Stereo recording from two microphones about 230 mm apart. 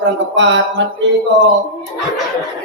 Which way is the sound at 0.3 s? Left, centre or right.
Right.